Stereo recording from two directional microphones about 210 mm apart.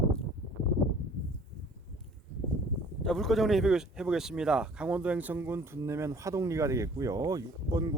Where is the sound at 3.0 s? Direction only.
Centre (ahead or behind).